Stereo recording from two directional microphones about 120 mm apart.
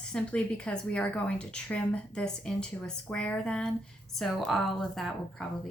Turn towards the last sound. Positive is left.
turn(degrees=0)  # may be behind; listen again after turning